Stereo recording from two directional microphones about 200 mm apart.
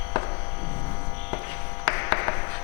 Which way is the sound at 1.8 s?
15° left (ahead or behind).